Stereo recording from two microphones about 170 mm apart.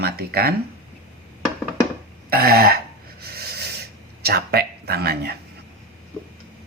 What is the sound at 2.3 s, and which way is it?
Speech, 65° right (ahead or behind).